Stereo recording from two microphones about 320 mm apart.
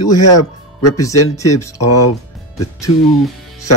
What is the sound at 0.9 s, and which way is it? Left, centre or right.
Speech, centre.